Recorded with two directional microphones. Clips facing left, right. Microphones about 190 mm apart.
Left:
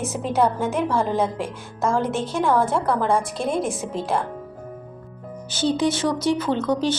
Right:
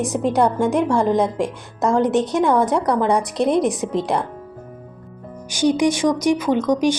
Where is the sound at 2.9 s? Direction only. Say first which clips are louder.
Right 2 dB; 15° right (ahead or behind).